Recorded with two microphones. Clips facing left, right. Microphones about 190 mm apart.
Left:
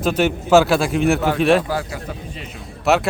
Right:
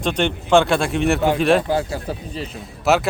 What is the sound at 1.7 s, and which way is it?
Speech, 25° right (ahead or behind).